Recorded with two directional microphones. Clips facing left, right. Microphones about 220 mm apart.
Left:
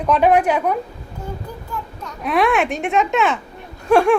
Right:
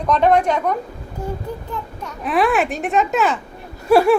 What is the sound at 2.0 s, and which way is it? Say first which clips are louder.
A child's voice: even; centre (ahead or behind).